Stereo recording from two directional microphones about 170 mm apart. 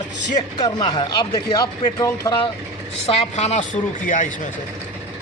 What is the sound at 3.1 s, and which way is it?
Speech, 35° left (ahead or behind).